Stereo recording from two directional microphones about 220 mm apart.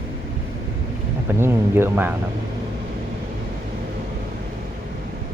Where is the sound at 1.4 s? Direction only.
10° right (ahead or behind).